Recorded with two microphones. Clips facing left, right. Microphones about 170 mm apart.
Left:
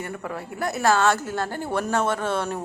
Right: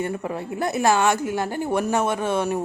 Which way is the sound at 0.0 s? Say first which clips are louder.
Right 5 dB; 20° right (ahead or behind).